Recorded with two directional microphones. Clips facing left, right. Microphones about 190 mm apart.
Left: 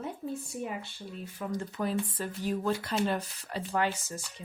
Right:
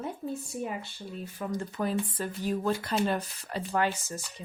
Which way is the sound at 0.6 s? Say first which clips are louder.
Right 2 dB; 40° right (ahead or behind).